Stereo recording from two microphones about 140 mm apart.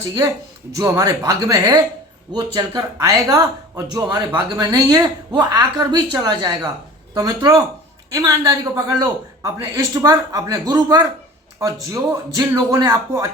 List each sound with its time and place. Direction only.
0.0 s a man's voice: 25° right (ahead or behind)